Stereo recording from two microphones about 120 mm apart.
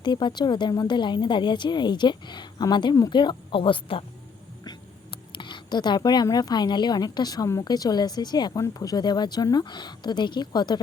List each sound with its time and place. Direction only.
0.0 s a woman's voice: 40° left (ahead or behind)
5.3 s a woman's voice: 40° left (ahead or behind)